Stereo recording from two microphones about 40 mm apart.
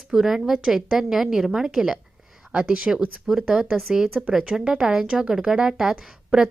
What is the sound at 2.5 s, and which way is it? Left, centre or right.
Speech, right.